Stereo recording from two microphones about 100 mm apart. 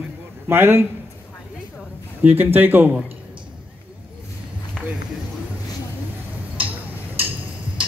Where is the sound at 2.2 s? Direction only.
20° right (ahead or behind).